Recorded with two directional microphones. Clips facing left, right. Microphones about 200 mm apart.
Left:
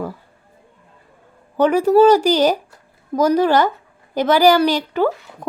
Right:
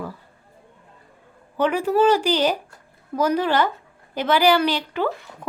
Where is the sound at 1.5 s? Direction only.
40° left (ahead or behind).